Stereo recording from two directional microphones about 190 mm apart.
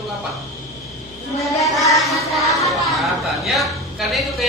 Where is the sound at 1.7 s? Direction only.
15° left (ahead or behind).